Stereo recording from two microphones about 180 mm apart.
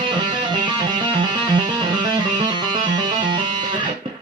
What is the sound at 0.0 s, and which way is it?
Music, 25° right (ahead or behind).